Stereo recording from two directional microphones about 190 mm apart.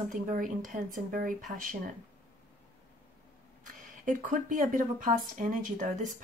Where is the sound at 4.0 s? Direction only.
45° right (ahead or behind).